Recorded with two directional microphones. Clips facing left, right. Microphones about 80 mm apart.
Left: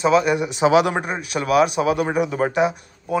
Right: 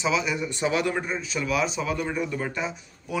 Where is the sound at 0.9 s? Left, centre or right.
Left.